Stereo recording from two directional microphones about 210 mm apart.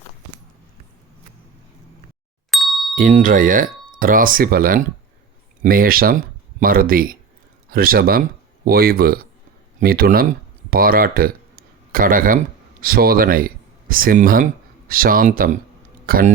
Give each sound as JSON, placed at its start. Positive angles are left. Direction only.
{"t": 2.5, "sound": "ding", "side_deg": 0}
{"t": 2.9, "sound": "speech", "side_deg": -35}